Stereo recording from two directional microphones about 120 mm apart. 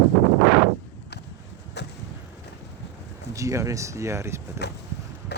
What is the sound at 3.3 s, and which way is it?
Speech, 25° right (ahead or behind).